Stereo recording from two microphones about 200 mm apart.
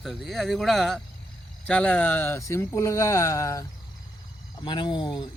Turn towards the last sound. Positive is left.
turn(degrees=25)  # may be behind; listen again after turning